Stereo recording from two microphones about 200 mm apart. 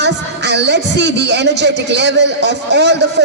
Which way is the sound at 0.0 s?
60° right (ahead or behind).